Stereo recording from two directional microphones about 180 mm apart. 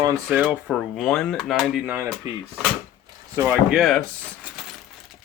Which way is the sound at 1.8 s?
10° right (ahead or behind).